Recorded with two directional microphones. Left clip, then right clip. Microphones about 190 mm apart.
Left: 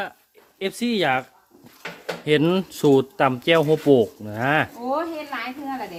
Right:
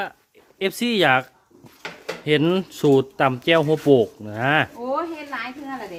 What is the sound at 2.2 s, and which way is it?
Speech, 5° right (ahead or behind).